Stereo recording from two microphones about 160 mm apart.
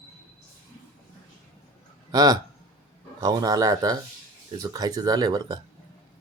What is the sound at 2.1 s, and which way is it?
A man's voice, 25° right (ahead or behind).